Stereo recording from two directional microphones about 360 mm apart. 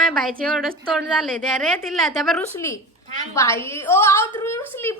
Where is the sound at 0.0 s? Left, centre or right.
Centre.